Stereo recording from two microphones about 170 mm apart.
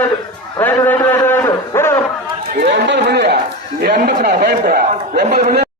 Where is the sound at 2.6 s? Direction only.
90° right.